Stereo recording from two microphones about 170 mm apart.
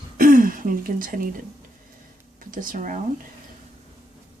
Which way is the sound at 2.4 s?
55° right (ahead or behind).